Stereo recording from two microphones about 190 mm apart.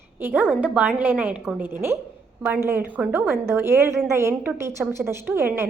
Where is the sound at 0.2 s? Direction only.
10° right (ahead or behind).